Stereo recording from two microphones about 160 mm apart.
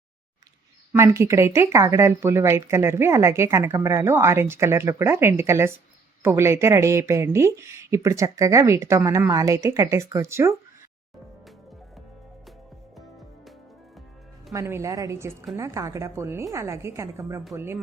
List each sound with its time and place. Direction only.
0.9 s speech: 15° right (ahead or behind)
13.0 s music: centre (ahead or behind)
14.5 s speech: 15° right (ahead or behind)